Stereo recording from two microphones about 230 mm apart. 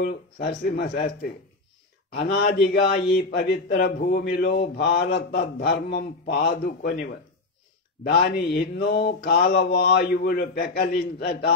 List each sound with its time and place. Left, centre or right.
0.0 s a man's voice: left